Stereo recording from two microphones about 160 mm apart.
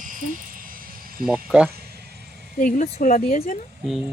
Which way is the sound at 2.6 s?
50° left (ahead or behind).